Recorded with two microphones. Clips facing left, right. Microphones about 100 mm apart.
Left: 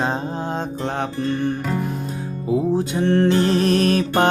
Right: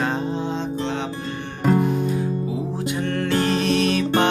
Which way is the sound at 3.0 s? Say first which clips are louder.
Left 5 dB; 30° left (ahead or behind).